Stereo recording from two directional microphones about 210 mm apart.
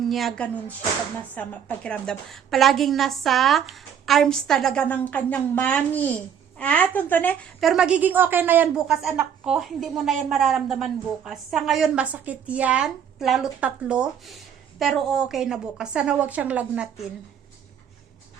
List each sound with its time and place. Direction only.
0.1 s speech: centre (ahead or behind)